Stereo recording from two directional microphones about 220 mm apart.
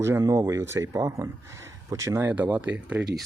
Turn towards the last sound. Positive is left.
turn(degrees=-5)  # may be behind; listen again after turning